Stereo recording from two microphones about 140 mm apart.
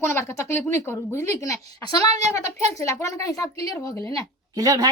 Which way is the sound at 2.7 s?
20° left (ahead or behind).